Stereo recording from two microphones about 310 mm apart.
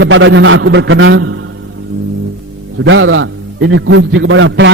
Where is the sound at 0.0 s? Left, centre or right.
Right.